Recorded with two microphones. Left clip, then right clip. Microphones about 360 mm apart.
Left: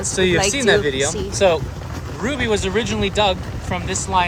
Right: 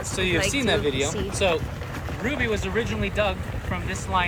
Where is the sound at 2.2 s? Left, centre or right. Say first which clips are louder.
Left 6 dB; centre.